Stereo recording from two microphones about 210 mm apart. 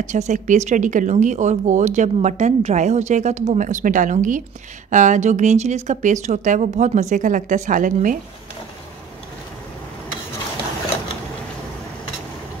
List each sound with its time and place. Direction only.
0.0 s speech: 35° right (ahead or behind)